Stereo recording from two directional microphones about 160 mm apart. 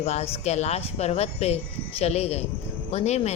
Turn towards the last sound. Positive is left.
turn(degrees=40)  # may be behind; listen again after turning